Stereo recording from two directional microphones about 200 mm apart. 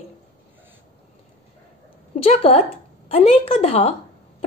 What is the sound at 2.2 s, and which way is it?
A woman's voice, 30° left (ahead or behind).